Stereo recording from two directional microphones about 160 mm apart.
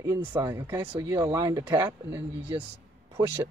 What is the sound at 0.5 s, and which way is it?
Speech, 15° right (ahead or behind).